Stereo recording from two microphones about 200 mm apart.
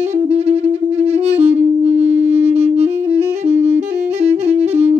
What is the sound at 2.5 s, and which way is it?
Music, 30° right (ahead or behind).